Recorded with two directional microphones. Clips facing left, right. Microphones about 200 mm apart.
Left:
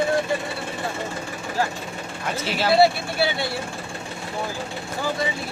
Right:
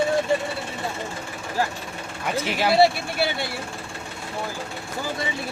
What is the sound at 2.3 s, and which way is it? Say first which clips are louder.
Speech: right 1 dB; 15° right (ahead or behind).